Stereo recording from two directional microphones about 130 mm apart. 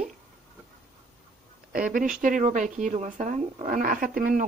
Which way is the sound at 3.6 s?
90° right.